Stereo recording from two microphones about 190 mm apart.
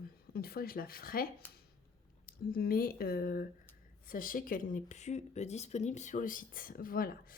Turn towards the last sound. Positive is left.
turn(degrees=50)  # may be behind; listen again after turning